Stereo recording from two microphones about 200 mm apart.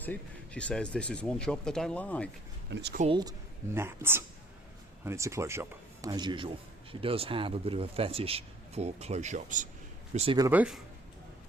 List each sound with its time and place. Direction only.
0.0 s speech: 5° left (ahead or behind)
2.6 s speech: 60° right (ahead or behind)
3.1 s speech: 20° right (ahead or behind); by 9.6 s 40° right (ahead or behind)
10.2 s speech: 30° right (ahead or behind)
10.4 s speech: 10° right (ahead or behind)